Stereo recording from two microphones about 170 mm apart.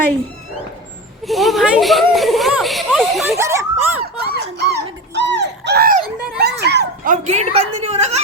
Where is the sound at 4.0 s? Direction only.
70° right (ahead or behind).